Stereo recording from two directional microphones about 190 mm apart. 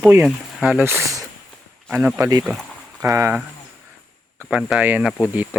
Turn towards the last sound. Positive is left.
turn(degrees=-10)  # may be behind; listen again after turning